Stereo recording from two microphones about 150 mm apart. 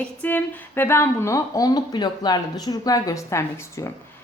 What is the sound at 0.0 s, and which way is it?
A woman's voice, 10° left (ahead or behind).